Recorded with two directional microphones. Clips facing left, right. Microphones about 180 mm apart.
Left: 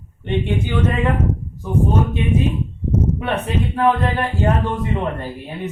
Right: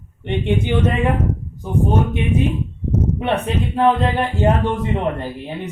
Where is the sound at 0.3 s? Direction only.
20° right (ahead or behind).